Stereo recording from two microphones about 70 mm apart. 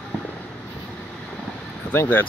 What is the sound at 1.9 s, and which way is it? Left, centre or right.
Speech, left.